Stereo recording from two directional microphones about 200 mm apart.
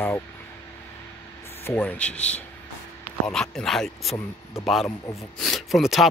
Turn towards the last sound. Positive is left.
turn(degrees=0)  # may be behind; listen again after turning